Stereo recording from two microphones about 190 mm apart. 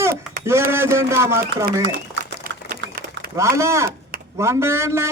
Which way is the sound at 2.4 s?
55° right (ahead or behind).